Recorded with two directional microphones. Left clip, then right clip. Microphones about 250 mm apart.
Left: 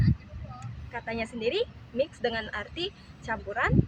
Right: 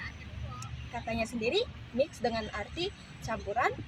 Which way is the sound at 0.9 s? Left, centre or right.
Centre.